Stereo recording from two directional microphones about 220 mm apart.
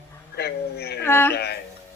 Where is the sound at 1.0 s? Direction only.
10° left (ahead or behind).